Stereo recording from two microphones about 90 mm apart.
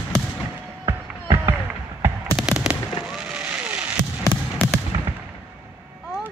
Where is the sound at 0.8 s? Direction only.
40° right (ahead or behind).